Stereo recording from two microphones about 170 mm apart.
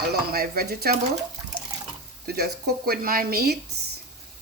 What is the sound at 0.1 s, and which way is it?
Speech, 65° right (ahead or behind).